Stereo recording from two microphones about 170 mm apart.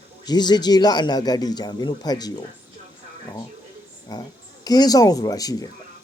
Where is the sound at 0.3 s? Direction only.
25° left (ahead or behind).